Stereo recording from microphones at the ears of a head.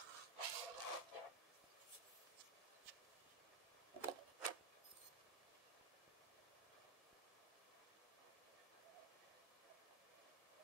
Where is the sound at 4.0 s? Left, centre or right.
Right.